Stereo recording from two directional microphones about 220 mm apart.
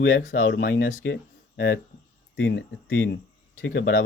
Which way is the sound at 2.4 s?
60° left (ahead or behind).